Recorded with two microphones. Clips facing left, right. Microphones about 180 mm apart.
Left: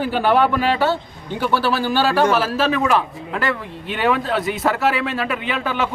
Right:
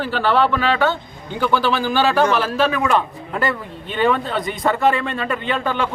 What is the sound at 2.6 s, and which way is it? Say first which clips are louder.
Speech: left 1 dB; 30° left (ahead or behind).